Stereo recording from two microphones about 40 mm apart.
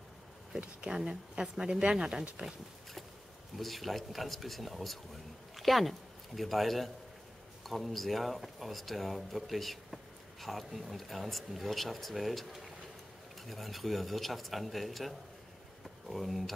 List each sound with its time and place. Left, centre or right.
0.6 s speech: right
3.5 s speech: centre